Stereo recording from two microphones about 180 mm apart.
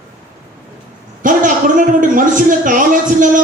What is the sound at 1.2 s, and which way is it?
A man's voice, 45° right (ahead or behind).